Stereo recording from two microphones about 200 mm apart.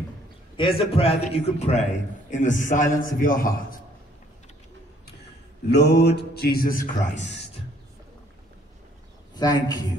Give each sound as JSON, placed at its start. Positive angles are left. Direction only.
{"t": 0.6, "sound": "a man's voice", "side_deg": 30}
{"t": 5.7, "sound": "a man's voice", "side_deg": 55}
{"t": 9.3, "sound": "a man's voice", "side_deg": 20}